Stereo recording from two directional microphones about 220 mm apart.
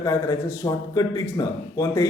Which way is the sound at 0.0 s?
15° left (ahead or behind).